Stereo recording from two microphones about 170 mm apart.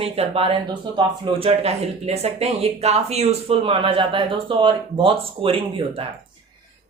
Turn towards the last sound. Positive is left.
turn(degrees=-35)  # may be behind; listen again after turning